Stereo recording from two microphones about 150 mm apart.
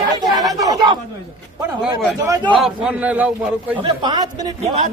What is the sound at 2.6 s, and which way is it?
Speech, 5° right (ahead or behind).